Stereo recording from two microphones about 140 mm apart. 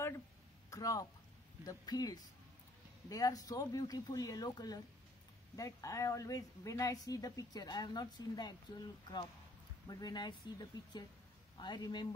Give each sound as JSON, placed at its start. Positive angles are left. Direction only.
{"t": 0.7, "sound": "speech", "side_deg": 25}